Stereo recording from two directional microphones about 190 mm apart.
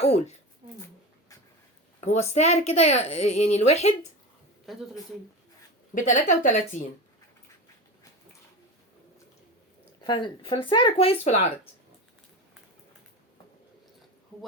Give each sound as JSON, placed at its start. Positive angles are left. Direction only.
{"t": 2.0, "sound": "a woman's voice", "side_deg": 35}
{"t": 5.9, "sound": "a woman's voice", "side_deg": 40}
{"t": 10.0, "sound": "speech", "side_deg": 25}